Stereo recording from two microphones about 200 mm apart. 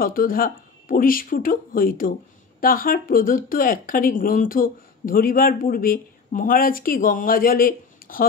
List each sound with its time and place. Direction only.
0.0 s speech: 45° left (ahead or behind)